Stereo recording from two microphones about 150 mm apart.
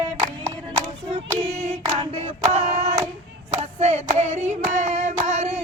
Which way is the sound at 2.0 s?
45° right (ahead or behind).